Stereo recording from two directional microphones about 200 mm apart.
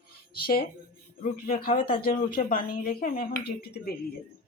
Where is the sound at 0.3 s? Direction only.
50° left (ahead or behind).